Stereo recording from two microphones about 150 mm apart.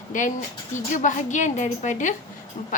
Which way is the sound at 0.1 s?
60° left (ahead or behind).